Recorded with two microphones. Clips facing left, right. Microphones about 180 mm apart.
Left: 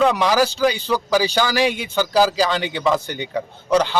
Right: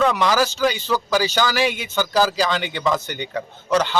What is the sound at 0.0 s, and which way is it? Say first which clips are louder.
A man's voice: left 2 dB; 10° left (ahead or behind).